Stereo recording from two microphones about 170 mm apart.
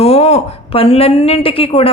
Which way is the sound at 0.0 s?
35° left (ahead or behind).